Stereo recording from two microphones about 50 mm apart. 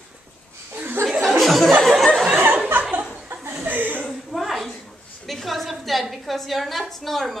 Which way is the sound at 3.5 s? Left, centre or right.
Right.